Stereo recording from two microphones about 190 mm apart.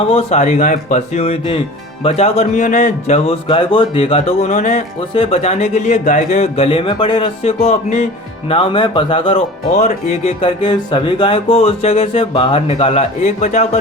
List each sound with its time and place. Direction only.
0.1 s speech: 35° left (ahead or behind)